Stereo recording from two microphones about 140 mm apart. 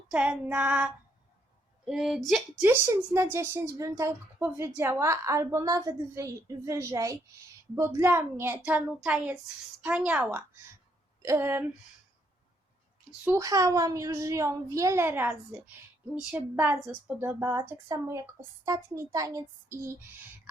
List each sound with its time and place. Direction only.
0.1 s a woman's voice: 10° right (ahead or behind)
2.6 s a woman's voice: 20° right (ahead or behind)
13.2 s a woman's voice: 20° right (ahead or behind)